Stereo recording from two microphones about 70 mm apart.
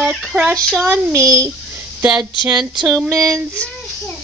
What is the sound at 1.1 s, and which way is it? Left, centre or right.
Speech, right.